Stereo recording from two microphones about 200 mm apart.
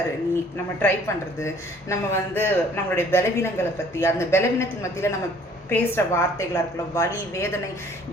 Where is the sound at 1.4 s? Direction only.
15° left (ahead or behind).